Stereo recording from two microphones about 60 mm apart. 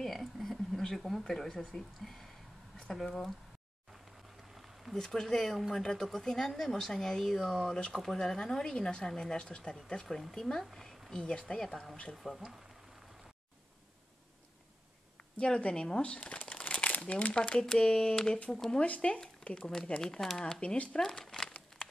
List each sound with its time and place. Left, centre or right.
0.0 s a sound: centre
2.9 s speech: centre
4.6 s speech: centre
15.3 s speech: centre
17.3 s speech: centre
18.8 s speech: centre
21.0 s shuffling cards: centre